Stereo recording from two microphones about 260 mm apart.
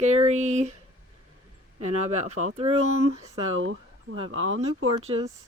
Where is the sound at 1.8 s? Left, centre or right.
Right.